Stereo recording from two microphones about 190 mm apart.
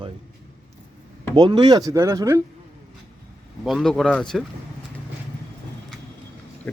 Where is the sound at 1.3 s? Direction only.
25° right (ahead or behind).